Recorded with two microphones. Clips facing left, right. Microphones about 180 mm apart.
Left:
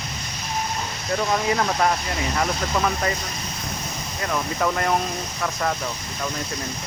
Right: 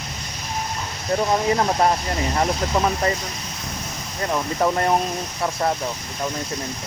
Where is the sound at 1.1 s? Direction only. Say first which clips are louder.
Right 3 dB; 25° right (ahead or behind).